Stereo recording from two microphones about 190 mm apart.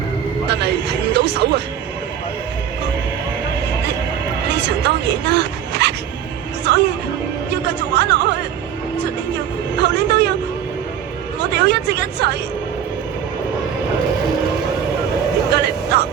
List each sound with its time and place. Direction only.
0.4 s speech: 60° right (ahead or behind)
4.4 s speech: 65° right (ahead or behind)
6.7 s music: 60° right (ahead or behind)
7.5 s speech: 65° right (ahead or behind)
9.7 s a woman's voice: 65° right (ahead or behind)
11.3 s a woman's voice: 60° right (ahead or behind)
15.5 s vehicle: 60° right (ahead or behind)